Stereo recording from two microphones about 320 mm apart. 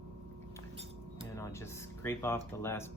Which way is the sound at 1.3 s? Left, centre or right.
Centre.